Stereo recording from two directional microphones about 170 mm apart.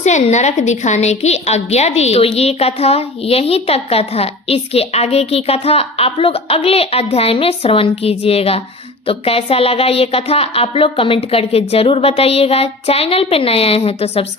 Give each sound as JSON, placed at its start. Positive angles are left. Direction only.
{"t": 0.0, "sound": "a woman's voice", "side_deg": 45}